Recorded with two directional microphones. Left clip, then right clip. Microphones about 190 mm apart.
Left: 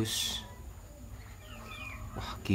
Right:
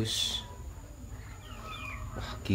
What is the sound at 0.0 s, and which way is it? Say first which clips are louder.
Speech: right 2 dB; 20° left (ahead or behind).